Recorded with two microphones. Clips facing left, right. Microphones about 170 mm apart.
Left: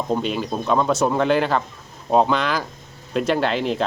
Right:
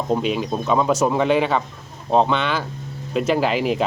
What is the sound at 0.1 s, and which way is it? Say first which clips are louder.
Speech: right 3 dB; centre (ahead or behind).